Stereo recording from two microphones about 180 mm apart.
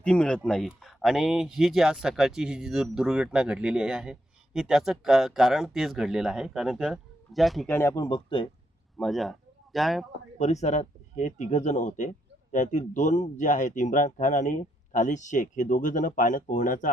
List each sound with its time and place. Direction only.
0.0 s speech: 5° left (ahead or behind)
7.7 s speech: 15° left (ahead or behind)
9.0 s speech: centre (ahead or behind)
10.3 s speech: 40° left (ahead or behind)